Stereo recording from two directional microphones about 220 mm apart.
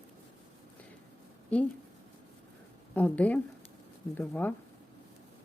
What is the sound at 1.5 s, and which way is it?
Speech, 5° left (ahead or behind).